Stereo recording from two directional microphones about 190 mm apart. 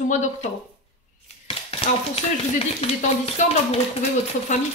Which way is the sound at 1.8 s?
30° left (ahead or behind).